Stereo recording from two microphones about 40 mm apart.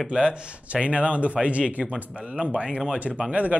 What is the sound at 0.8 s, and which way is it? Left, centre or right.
Speech, right.